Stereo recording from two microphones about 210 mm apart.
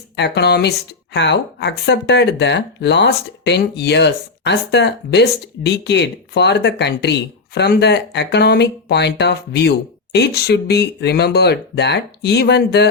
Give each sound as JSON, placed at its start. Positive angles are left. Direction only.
{"t": 0.2, "sound": "speech", "side_deg": 50}